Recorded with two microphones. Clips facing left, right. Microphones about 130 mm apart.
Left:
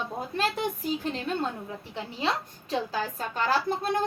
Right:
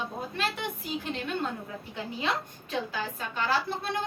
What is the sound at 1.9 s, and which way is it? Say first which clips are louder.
A woman's voice: left 2 dB; 30° left (ahead or behind).